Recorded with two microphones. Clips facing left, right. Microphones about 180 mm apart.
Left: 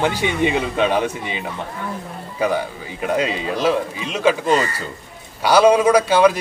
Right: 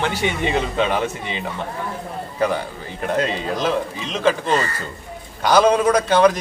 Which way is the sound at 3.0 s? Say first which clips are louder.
Left 1 dB; 10° left (ahead or behind).